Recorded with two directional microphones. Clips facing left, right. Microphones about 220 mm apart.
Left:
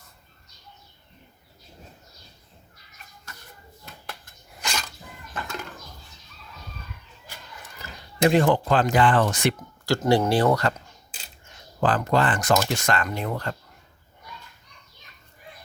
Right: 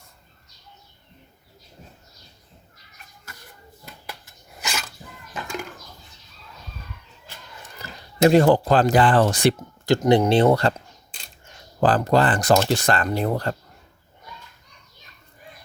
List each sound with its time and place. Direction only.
4.6 s dog: 5° right (ahead or behind)
5.3 s a sound: 10° right (ahead or behind)
8.2 s speech: 35° right (ahead or behind)
10.1 s speech: 20° right (ahead or behind); by 13.6 s 35° right (ahead or behind)